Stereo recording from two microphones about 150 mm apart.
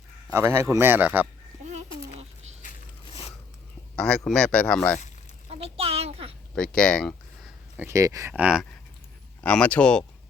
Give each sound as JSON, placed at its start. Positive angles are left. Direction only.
{"t": 0.3, "sound": "a man's voice", "side_deg": -15}
{"t": 2.6, "sound": "biting", "side_deg": 60}
{"t": 3.9, "sound": "a man's voice", "side_deg": 5}
{"t": 5.5, "sound": "a sound", "side_deg": -40}
{"t": 6.5, "sound": "speech", "side_deg": 5}
{"t": 7.8, "sound": "speech", "side_deg": -20}
{"t": 8.3, "sound": "a man's voice", "side_deg": -5}
{"t": 9.4, "sound": "speech", "side_deg": 10}